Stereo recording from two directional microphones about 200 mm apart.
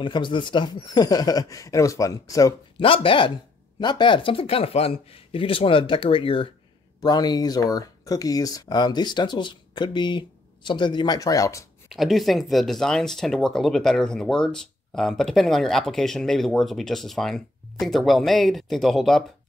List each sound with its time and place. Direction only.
0.0 s speech: 25° left (ahead or behind)
11.9 s speech: centre (ahead or behind)